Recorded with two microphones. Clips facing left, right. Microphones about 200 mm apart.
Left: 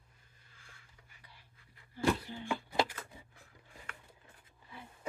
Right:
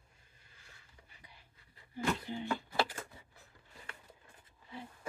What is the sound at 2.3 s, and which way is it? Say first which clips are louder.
Speech: right 5 dB; 20° right (ahead or behind).